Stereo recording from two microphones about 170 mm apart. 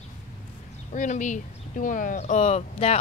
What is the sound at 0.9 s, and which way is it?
Speech, 45° left (ahead or behind).